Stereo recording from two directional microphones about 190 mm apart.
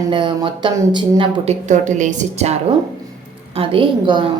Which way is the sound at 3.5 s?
30° right (ahead or behind).